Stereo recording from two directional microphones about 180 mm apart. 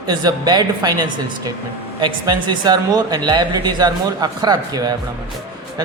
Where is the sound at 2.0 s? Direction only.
25° right (ahead or behind).